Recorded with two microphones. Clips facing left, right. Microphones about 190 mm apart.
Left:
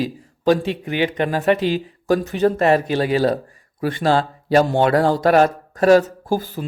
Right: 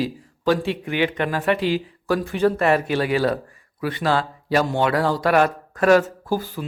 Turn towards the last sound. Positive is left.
turn(degrees=40)  # may be behind; listen again after turning